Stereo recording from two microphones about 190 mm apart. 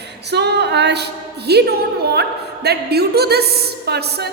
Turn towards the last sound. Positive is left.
turn(degrees=-60)  # may be behind; listen again after turning